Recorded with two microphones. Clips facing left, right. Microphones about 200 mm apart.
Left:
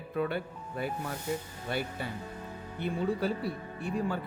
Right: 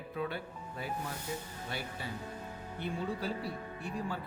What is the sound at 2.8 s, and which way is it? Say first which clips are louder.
Speech: left 5 dB; 60° left (ahead or behind).